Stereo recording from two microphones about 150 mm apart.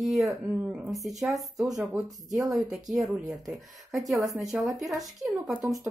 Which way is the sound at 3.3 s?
Centre (ahead or behind).